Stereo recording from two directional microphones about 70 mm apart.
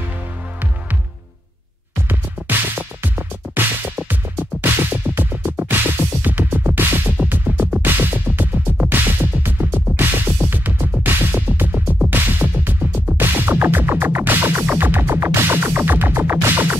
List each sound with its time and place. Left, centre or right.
2.0 s music: right